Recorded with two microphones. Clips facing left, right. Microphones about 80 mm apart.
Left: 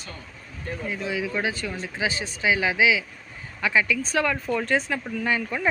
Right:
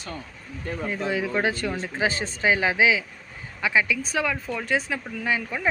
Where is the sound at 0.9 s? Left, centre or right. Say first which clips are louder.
Right 2 dB; right.